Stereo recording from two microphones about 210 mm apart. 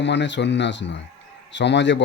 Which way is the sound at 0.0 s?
55° left (ahead or behind).